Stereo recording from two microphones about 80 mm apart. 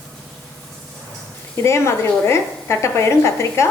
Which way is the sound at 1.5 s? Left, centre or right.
Left.